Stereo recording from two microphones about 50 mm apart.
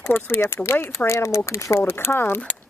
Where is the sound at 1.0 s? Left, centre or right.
Left.